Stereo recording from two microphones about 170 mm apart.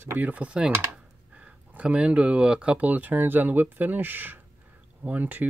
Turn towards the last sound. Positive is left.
turn(degrees=-10)  # may be behind; listen again after turning